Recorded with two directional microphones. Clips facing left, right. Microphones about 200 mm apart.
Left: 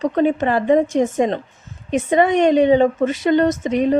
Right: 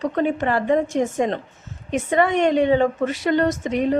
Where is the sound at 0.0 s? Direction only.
20° left (ahead or behind).